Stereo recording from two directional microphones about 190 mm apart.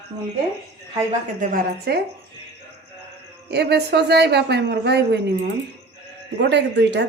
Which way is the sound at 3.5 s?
60° right (ahead or behind).